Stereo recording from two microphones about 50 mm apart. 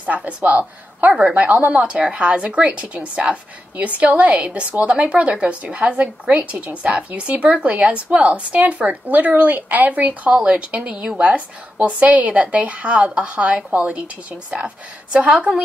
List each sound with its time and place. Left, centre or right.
0.0 s a woman's voice: right
15.1 s a woman's voice: centre